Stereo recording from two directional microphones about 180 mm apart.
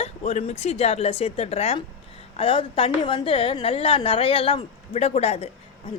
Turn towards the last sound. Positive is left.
turn(degrees=35)  # may be behind; listen again after turning